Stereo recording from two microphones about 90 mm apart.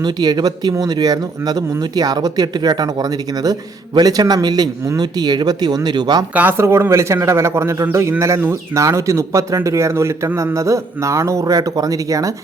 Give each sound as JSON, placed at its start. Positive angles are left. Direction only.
{"t": 0.0, "sound": "speech", "side_deg": -50}
{"t": 6.3, "sound": "a man's voice", "side_deg": -20}